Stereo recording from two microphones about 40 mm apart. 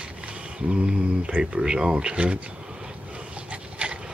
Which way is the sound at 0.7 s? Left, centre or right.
Right.